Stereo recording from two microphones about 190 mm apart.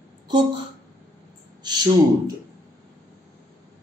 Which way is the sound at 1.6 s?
20° right (ahead or behind).